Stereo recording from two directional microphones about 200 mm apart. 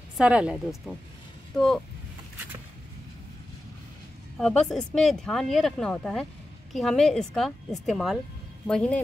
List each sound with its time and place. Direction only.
0.2 s speech: 5° right (ahead or behind)
4.4 s speech: 5° left (ahead or behind)